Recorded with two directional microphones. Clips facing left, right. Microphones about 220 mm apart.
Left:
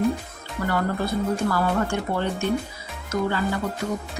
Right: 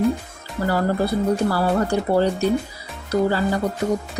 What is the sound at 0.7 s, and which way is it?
A woman's voice, 35° right (ahead or behind).